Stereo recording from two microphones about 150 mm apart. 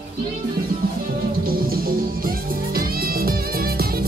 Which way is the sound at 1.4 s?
85° right.